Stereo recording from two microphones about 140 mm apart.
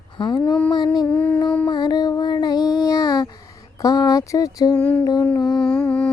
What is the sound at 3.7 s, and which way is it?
Speech, 25° left (ahead or behind).